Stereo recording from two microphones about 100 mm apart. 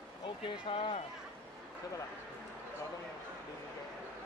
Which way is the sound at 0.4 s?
65° left (ahead or behind).